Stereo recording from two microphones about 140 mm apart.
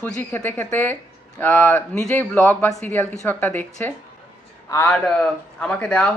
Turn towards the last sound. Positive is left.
turn(degrees=10)  # may be behind; listen again after turning